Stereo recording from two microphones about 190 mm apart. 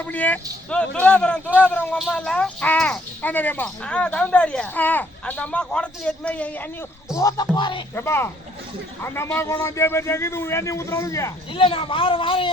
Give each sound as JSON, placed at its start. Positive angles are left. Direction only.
{"t": 0.1, "sound": "a man's voice", "side_deg": 10}
{"t": 7.2, "sound": "speech", "side_deg": 20}
{"t": 7.9, "sound": "speech", "side_deg": 15}
{"t": 11.5, "sound": "speech", "side_deg": 30}